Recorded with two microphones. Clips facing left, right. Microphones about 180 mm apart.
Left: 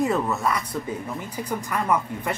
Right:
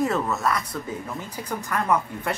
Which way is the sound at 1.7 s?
5° left (ahead or behind).